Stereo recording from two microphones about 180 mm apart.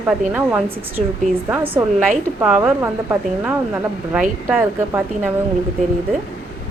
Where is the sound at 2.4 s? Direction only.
5° right (ahead or behind).